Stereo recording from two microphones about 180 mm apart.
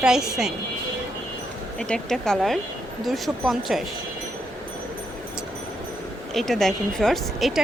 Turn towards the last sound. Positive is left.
turn(degrees=0)  # may be behind; listen again after turning